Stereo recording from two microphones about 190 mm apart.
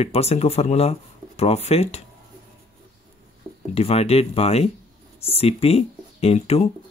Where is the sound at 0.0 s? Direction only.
35° left (ahead or behind).